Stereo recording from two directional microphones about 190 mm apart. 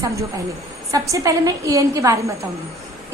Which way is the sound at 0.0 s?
15° right (ahead or behind).